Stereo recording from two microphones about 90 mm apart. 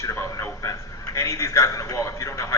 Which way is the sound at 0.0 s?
30° left (ahead or behind).